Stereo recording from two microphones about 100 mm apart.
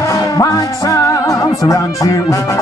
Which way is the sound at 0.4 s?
35° left (ahead or behind).